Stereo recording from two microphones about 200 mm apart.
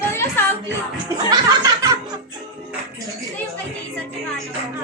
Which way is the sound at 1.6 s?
15° right (ahead or behind).